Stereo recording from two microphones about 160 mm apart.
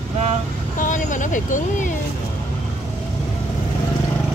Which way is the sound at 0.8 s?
50° left (ahead or behind).